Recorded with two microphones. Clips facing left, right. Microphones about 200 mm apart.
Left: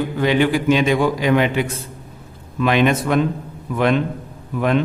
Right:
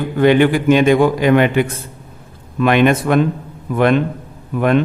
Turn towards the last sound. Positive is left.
turn(degrees=-55)  # may be behind; listen again after turning